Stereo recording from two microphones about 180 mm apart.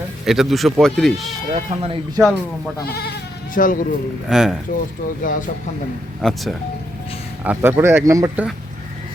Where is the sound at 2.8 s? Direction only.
60° left (ahead or behind).